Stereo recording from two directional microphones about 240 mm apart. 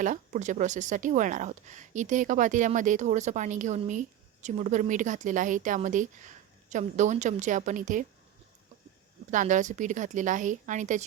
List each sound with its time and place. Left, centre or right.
0.0 s a woman's voice: right
9.3 s a woman's voice: right